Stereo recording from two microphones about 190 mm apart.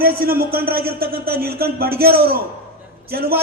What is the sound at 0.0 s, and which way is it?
A man's voice, 50° right (ahead or behind).